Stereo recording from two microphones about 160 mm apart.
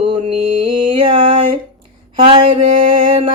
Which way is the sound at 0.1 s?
35° right (ahead or behind).